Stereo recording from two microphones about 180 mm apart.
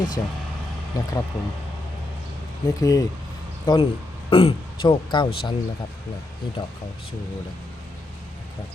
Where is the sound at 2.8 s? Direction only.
20° left (ahead or behind).